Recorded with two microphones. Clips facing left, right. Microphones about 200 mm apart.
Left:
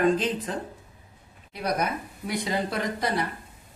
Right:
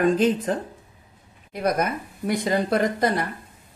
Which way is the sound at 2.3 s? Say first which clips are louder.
Right 6 dB; 50° right (ahead or behind).